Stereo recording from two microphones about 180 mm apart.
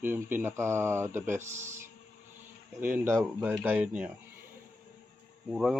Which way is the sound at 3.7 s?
10° right (ahead or behind).